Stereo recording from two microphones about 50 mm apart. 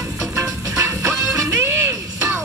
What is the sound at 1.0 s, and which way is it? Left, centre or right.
Music, right.